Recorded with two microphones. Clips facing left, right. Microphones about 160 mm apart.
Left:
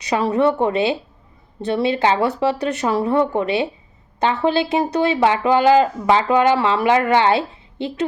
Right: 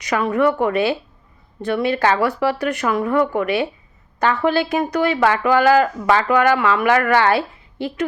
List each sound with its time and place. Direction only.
0.1 s speech: 25° left (ahead or behind)